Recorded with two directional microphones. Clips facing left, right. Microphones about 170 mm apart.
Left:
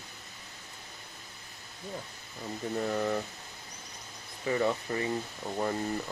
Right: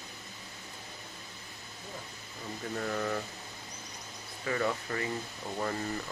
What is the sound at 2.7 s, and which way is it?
Speech, 15° left (ahead or behind).